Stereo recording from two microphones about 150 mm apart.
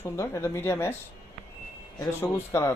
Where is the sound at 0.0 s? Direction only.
15° left (ahead or behind).